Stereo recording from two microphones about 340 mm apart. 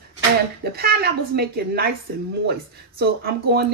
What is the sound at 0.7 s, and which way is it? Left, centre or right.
Speech, right.